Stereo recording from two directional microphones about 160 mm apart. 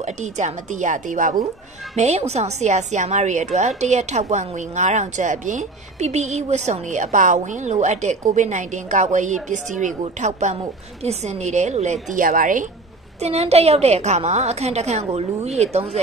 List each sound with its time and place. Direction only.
0.0 s a woman's voice: 45° right (ahead or behind)
13.2 s a woman's voice: 40° right (ahead or behind)